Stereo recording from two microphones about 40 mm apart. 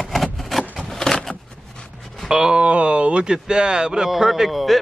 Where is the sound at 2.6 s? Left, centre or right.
Right.